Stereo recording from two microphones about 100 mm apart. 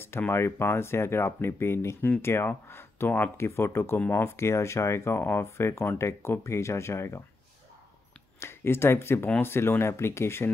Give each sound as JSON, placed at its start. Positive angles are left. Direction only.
{"t": 0.3, "sound": "speech", "side_deg": 25}
{"t": 8.4, "sound": "speech", "side_deg": 25}